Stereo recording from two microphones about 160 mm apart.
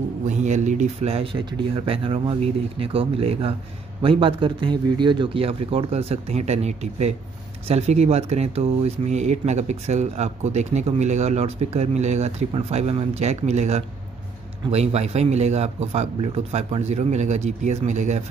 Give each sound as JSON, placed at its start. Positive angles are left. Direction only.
{"t": 0.3, "sound": "speech", "side_deg": -50}